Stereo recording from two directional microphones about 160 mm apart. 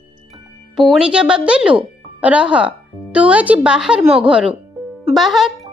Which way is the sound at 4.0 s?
35° right (ahead or behind).